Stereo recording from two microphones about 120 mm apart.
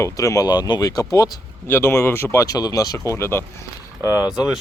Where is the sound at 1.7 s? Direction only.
20° left (ahead or behind).